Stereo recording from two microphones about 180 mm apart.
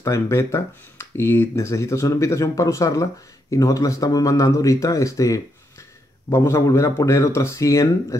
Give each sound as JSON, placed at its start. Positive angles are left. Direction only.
{"t": 0.0, "sound": "speech", "side_deg": 15}